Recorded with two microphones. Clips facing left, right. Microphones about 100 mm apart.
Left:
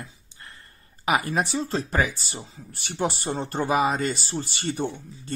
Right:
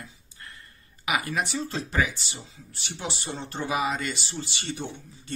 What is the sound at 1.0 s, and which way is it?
Speech, 35° left (ahead or behind).